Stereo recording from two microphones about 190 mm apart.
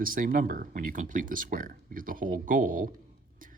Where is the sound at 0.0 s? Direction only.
50° right (ahead or behind).